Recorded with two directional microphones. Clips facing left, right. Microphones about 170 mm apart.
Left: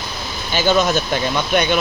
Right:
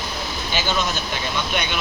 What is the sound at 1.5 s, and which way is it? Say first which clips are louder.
Speech: left 12 dB; 45° left (ahead or behind).